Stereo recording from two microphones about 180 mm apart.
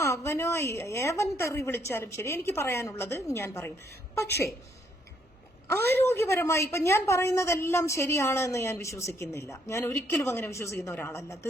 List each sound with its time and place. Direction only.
0.0 s a woman's voice: 15° left (ahead or behind)
5.6 s a woman's voice: 15° left (ahead or behind)